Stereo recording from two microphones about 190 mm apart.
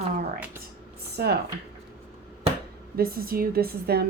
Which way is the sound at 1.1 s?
55° right (ahead or behind).